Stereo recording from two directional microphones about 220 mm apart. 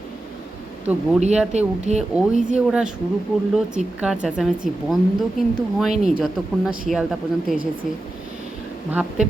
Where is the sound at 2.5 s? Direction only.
5° right (ahead or behind).